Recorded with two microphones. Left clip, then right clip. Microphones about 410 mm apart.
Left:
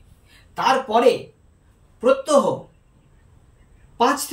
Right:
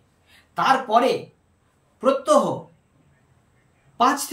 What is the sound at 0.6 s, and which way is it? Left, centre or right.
Speech, centre.